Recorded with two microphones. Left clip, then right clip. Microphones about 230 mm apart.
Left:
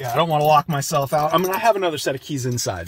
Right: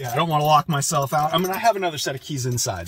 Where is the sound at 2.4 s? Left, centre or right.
Centre.